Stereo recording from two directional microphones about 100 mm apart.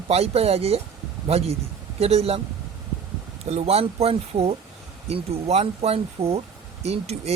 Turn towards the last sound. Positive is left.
turn(degrees=-90)